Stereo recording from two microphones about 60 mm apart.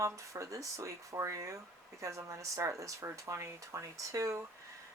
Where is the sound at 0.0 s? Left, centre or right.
Right.